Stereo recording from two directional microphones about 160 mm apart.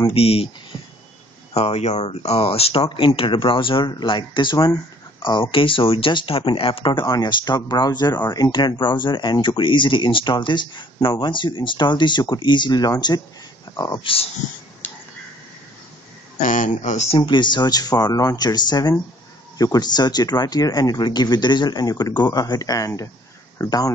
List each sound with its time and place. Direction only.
0.1 s speech: 35° left (ahead or behind)
1.5 s speech: 40° left (ahead or behind); by 14.0 s 20° left (ahead or behind)
14.0 s speech: 35° left (ahead or behind)
16.3 s speech: 55° left (ahead or behind); by 23.9 s 25° left (ahead or behind)